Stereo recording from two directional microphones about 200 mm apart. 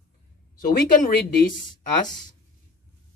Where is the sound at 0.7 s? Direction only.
45° left (ahead or behind).